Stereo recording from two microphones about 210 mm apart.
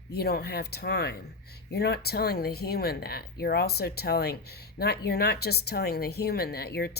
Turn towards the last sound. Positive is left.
turn(degrees=50)  # may be behind; listen again after turning